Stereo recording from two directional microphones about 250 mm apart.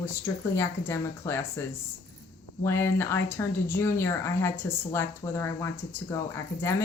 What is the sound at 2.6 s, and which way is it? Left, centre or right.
A woman's voice, centre.